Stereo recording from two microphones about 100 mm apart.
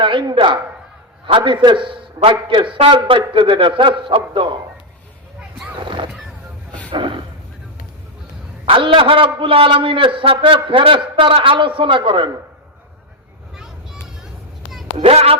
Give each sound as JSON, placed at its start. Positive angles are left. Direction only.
{"t": 0.0, "sound": "a man's voice", "side_deg": -55}
{"t": 5.8, "sound": "a sound", "side_deg": -55}
{"t": 6.9, "sound": "speech", "side_deg": -55}
{"t": 8.6, "sound": "a man's voice", "side_deg": -60}
{"t": 15.0, "sound": "speech", "side_deg": -85}